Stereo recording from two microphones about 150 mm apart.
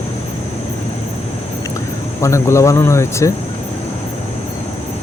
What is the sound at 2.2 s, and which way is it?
Speech, 20° left (ahead or behind).